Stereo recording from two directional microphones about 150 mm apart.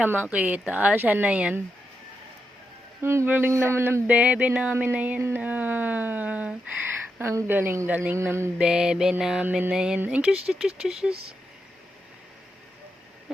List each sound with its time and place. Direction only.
0.0 s speech: 10° right (ahead or behind)
3.0 s speech: 15° right (ahead or behind)
8.5 s mantra: 5° right (ahead or behind)
11.1 s speech: 40° right (ahead or behind)